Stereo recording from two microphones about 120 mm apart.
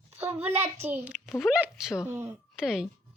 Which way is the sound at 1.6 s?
5° right (ahead or behind).